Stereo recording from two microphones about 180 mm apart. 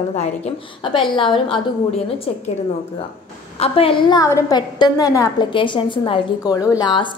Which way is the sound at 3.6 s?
30° left (ahead or behind).